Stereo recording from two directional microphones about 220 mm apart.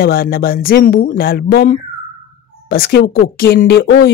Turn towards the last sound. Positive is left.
turn(degrees=50)  # may be behind; listen again after turning